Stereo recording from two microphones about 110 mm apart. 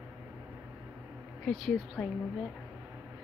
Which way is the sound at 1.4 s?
Centre (ahead or behind).